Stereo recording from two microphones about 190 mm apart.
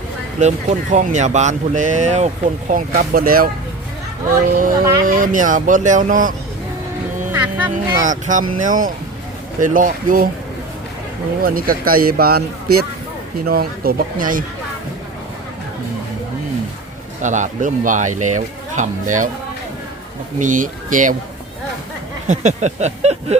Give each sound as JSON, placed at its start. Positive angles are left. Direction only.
{"t": 0.3, "sound": "speech", "side_deg": -40}
{"t": 5.0, "sound": "speech", "side_deg": -45}
{"t": 7.3, "sound": "music", "side_deg": -10}
{"t": 7.7, "sound": "speech", "side_deg": -40}
{"t": 11.4, "sound": "speech", "side_deg": -50}
{"t": 17.2, "sound": "speech", "side_deg": -40}
{"t": 20.4, "sound": "speech", "side_deg": -45}
{"t": 22.3, "sound": "speech", "side_deg": -40}